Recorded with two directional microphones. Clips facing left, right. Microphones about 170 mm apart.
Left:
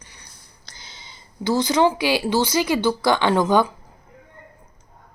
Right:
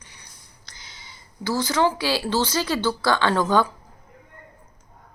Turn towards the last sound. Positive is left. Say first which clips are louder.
# left 2 dB
turn(degrees=15)  # may be behind; listen again after turning